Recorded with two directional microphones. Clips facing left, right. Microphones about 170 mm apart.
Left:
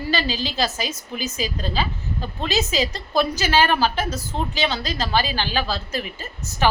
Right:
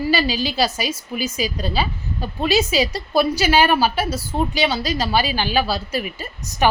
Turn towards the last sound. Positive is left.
turn(degrees=-15)  # may be behind; listen again after turning